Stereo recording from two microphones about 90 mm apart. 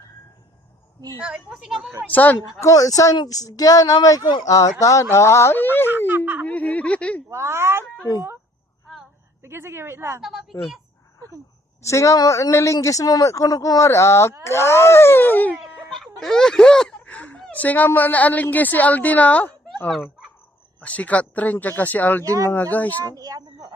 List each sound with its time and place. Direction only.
1.2 s a woman's voice: 10° right (ahead or behind)
2.0 s speech: 20° left (ahead or behind)
2.6 s speech: 40° left (ahead or behind); by 5.9 s 25° left (ahead or behind)
6.1 s speech: 20° right (ahead or behind)
6.4 s speech: 15° left (ahead or behind)
7.3 s speech: 30° right (ahead or behind)
9.4 s a woman's voice: 25° right (ahead or behind)
10.2 s speech: 5° right (ahead or behind)
11.8 s speech: 35° left (ahead or behind)
15.5 s speech: centre (ahead or behind); by 19.5 s 15° left (ahead or behind)
20.8 s speech: 15° left (ahead or behind)
22.2 s speech: 40° right (ahead or behind)
22.4 s speech: 20° left (ahead or behind)
23.0 s speech: 40° right (ahead or behind)